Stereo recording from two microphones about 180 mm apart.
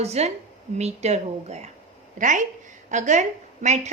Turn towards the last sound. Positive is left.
turn(degrees=-40)  # may be behind; listen again after turning